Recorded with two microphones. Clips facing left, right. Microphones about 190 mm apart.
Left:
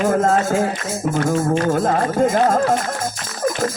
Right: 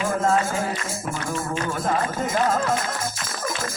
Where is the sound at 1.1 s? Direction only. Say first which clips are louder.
Left 11 dB; 45° left (ahead or behind).